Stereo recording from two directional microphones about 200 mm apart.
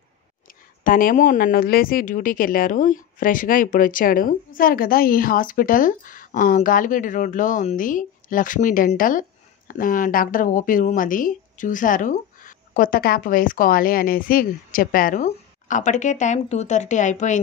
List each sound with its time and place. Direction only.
0.5 s speech: 45° left (ahead or behind)